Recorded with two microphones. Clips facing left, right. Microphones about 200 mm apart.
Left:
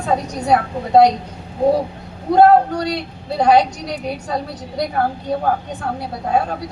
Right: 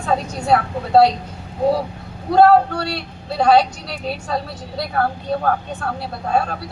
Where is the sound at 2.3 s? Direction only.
20° left (ahead or behind).